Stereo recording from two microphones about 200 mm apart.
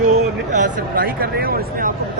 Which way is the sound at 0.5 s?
40° right (ahead or behind).